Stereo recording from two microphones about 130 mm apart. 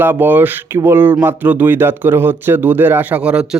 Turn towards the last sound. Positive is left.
turn(degrees=-10)  # may be behind; listen again after turning